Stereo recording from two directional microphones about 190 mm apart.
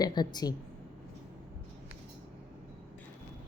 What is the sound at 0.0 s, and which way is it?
Speech, 20° left (ahead or behind).